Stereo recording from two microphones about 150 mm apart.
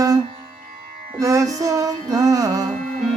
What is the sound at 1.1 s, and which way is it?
Music, 20° right (ahead or behind).